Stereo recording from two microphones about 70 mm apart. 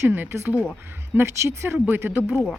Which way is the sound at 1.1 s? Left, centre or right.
Right.